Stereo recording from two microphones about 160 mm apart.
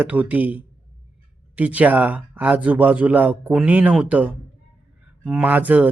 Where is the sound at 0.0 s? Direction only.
10° right (ahead or behind).